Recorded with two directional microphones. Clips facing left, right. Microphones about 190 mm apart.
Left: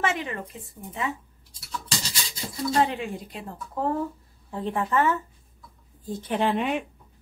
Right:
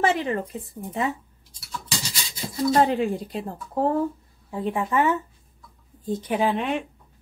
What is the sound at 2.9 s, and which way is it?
Speech, 35° right (ahead or behind).